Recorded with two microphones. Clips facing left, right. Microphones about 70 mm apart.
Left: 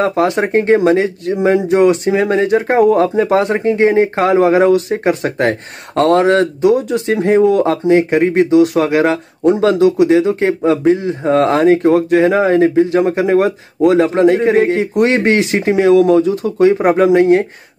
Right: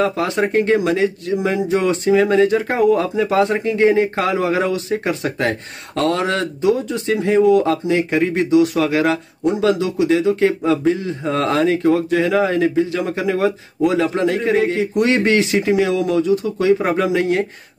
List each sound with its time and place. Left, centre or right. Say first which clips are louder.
0.0 s speech: left 4 dB; left